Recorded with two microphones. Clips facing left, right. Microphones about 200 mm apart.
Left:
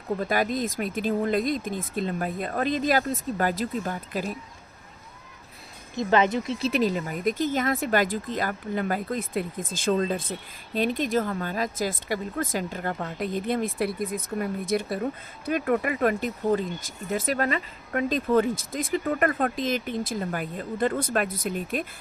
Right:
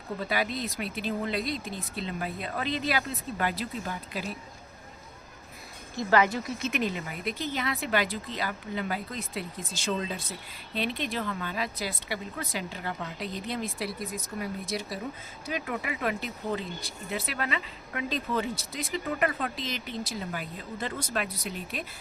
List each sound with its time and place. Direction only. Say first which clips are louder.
0.2 s speech: left 3 dB; 45° left (ahead or behind)
6.0 s speech: left 3 dB; 20° left (ahead or behind); by 21.8 s 50° left (ahead or behind)